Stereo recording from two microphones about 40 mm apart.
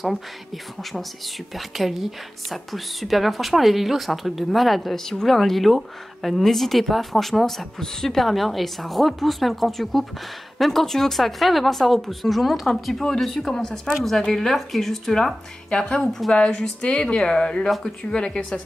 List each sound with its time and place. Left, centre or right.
1.5 s speech: centre
16.3 s speech: left